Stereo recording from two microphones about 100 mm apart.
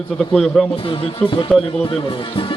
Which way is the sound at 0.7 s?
65° left (ahead or behind).